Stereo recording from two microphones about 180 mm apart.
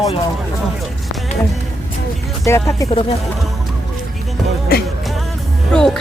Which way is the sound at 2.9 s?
30° left (ahead or behind).